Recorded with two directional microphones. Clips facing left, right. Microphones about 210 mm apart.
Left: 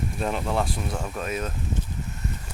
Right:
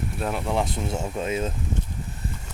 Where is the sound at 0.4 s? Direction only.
20° right (ahead or behind).